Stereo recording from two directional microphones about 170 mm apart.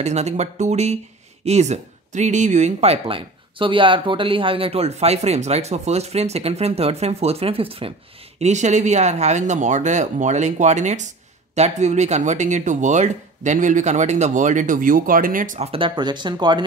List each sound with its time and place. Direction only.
0.0 s speech: 40° right (ahead or behind)
8.4 s speech: 45° right (ahead or behind)
15.7 s speech: 30° right (ahead or behind)